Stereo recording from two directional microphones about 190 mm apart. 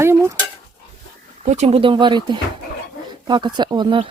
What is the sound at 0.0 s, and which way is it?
Cutlery, 15° right (ahead or behind).